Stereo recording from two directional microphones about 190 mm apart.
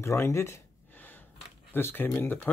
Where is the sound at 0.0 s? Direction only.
15° left (ahead or behind).